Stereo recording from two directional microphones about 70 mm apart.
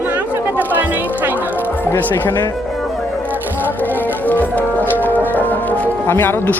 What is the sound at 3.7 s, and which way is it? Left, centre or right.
Music, left.